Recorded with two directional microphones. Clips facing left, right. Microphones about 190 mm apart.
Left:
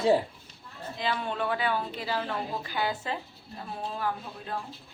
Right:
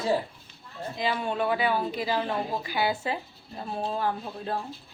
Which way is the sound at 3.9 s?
30° right (ahead or behind).